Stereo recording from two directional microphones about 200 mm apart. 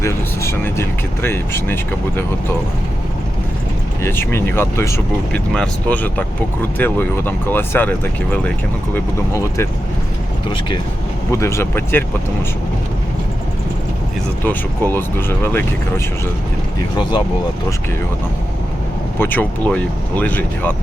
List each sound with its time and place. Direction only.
0.0 s speech: 15° left (ahead or behind)
4.0 s speech: 10° left (ahead or behind)
11.3 s speech: 15° left (ahead or behind)
14.4 s speech: 10° left (ahead or behind)
17.0 s speech: 25° left (ahead or behind)
19.2 s speech: 10° left (ahead or behind)